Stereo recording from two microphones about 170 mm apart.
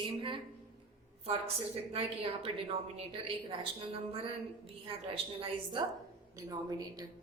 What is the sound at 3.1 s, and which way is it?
A woman's voice, 35° right (ahead or behind).